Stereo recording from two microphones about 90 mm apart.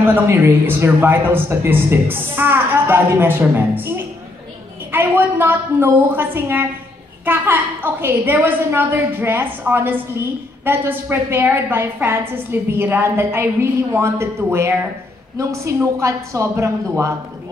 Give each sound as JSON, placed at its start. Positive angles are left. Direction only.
{"t": 0.0, "sound": "a woman's voice", "side_deg": -25}